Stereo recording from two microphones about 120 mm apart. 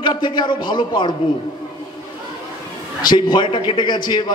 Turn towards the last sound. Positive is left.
turn(degrees=40)  # may be behind; listen again after turning